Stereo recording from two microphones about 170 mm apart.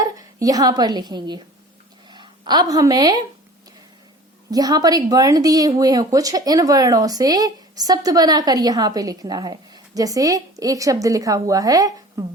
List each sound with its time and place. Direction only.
0.0 s speech: 20° right (ahead or behind)
4.5 s speech: 20° right (ahead or behind)